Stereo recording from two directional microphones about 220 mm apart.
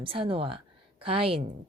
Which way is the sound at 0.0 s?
25° right (ahead or behind).